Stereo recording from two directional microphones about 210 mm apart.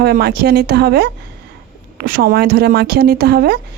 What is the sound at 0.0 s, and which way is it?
Speech, 50° right (ahead or behind).